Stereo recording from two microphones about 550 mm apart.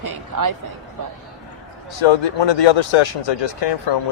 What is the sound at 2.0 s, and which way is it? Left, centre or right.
Speech, left.